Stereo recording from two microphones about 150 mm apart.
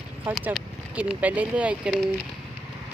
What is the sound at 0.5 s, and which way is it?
Speech, 5° right (ahead or behind).